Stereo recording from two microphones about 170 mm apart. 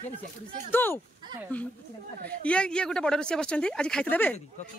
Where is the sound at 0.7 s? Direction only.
10° left (ahead or behind).